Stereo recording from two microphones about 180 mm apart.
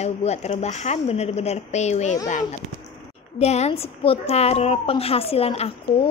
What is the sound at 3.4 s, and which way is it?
A woman's voice, 35° left (ahead or behind).